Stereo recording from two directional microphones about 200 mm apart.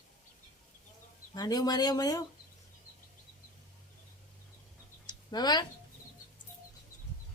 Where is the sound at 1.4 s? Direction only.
20° left (ahead or behind).